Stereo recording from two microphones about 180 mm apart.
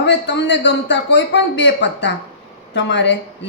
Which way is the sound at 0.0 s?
75° left (ahead or behind).